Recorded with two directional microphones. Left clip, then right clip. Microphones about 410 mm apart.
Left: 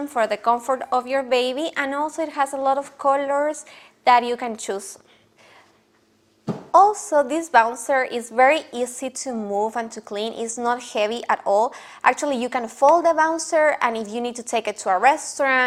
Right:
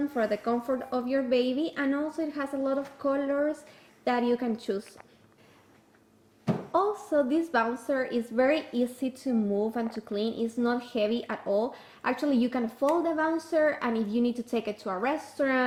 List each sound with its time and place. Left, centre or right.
0.1 s a woman's voice: left
6.7 s a woman's voice: left